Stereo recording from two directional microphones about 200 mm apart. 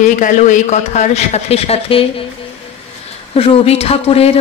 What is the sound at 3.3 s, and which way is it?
Speech, 30° left (ahead or behind).